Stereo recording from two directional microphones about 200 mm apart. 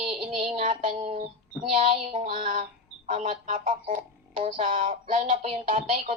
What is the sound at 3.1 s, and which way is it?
Speech, 25° right (ahead or behind).